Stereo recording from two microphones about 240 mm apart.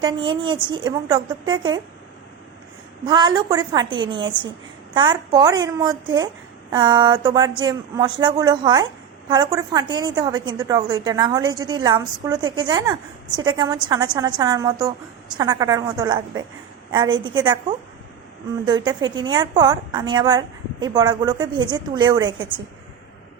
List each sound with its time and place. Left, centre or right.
0.0 s a woman's voice: centre
3.0 s a woman's voice: centre